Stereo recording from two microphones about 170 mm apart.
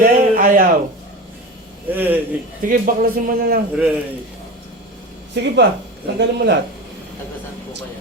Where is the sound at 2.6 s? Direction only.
55° right (ahead or behind).